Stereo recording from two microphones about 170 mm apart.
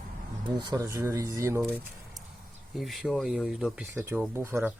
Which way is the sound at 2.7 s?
Centre (ahead or behind).